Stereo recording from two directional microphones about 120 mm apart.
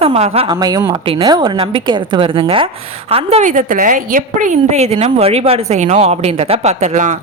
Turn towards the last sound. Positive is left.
turn(degrees=-75)  # may be behind; listen again after turning